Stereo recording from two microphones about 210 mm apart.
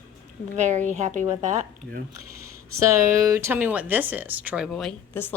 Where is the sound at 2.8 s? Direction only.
15° right (ahead or behind).